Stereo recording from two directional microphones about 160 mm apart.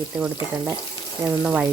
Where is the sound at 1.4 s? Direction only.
10° right (ahead or behind).